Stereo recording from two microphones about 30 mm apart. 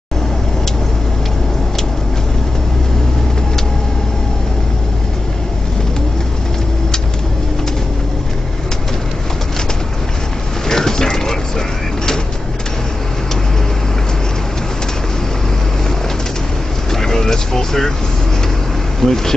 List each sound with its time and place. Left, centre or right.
10.7 s a sound: centre
16.9 s vehicle: centre
18.9 s vehicle: centre